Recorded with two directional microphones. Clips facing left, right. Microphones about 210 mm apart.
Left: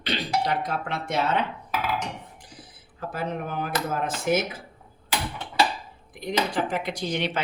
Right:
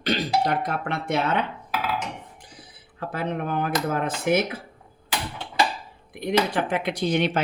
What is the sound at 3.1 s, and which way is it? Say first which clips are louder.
Speech: right 3 dB; 60° right (ahead or behind).